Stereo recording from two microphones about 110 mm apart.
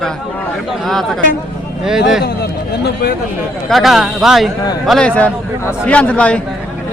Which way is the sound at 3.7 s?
Centre (ahead or behind).